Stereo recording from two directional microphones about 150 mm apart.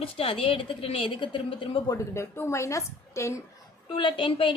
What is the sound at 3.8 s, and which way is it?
Speech, 35° left (ahead or behind).